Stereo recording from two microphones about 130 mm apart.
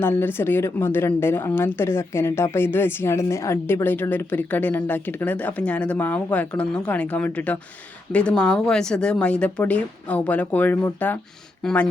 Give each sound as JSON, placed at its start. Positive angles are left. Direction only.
{"t": 0.0, "sound": "a woman's voice", "side_deg": 15}